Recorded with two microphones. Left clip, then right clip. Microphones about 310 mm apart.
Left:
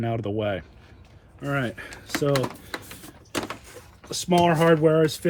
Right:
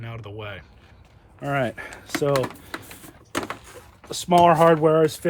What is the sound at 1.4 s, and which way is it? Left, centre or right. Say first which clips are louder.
Speech: right 3 dB; centre.